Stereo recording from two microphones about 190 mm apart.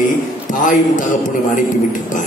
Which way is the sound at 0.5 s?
45° left (ahead or behind).